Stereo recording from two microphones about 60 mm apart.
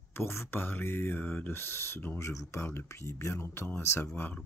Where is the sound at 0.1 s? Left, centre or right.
Left.